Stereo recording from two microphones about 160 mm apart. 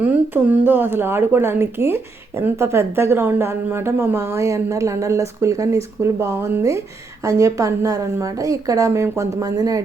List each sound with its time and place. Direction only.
0.0 s a woman's voice: 10° right (ahead or behind)